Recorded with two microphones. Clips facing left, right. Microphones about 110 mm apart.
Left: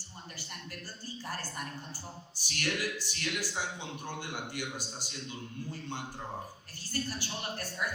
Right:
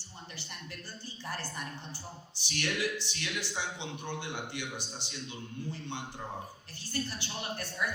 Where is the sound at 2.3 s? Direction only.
45° left (ahead or behind).